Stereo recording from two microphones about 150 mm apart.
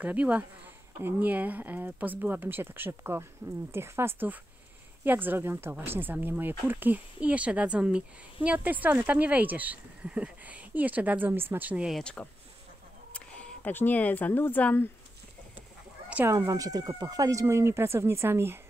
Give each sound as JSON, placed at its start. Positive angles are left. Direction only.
{"t": 0.0, "sound": "speech", "side_deg": -10}
{"t": 12.0, "sound": "speech", "side_deg": 5}
{"t": 16.1, "sound": "speech", "side_deg": -10}
{"t": 16.3, "sound": "speech", "side_deg": -25}